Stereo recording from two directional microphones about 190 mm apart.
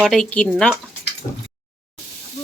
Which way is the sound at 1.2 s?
25° left (ahead or behind).